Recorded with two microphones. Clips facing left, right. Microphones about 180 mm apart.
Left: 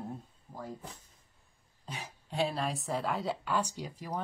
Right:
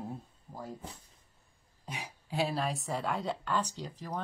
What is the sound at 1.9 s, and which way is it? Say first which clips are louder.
Throat clearing: right 1 dB; 10° right (ahead or behind).